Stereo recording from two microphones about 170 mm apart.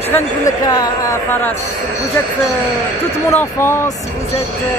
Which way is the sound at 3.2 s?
15° left (ahead or behind).